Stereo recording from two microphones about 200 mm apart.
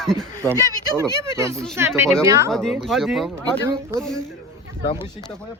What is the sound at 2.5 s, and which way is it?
Speech, centre (ahead or behind).